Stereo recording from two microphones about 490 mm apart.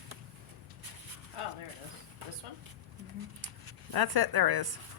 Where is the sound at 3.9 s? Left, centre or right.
Right.